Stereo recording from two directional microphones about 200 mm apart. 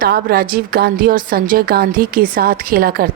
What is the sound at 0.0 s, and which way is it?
Speech, 50° right (ahead or behind).